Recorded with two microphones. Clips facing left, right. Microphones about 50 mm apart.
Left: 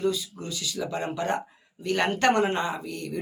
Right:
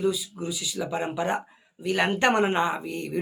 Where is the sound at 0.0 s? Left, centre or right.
Centre.